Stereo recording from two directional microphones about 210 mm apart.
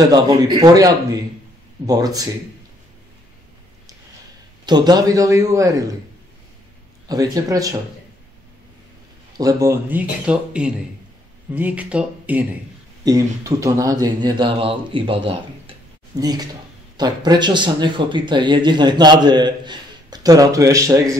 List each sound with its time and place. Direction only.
0.0 s speech: 20° right (ahead or behind)
4.6 s speech: 20° right (ahead or behind)
7.1 s speech: 15° right (ahead or behind)
9.4 s speech: 15° right (ahead or behind)